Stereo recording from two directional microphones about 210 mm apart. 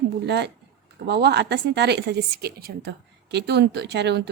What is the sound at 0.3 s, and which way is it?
A woman's voice, 55° right (ahead or behind).